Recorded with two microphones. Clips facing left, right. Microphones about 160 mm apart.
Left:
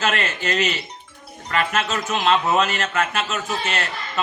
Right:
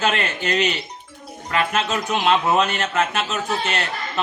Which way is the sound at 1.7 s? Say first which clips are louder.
Right 1 dB; 20° right (ahead or behind).